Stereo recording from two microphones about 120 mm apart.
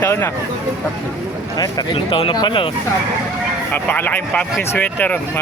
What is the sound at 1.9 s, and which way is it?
Speech, 45° left (ahead or behind).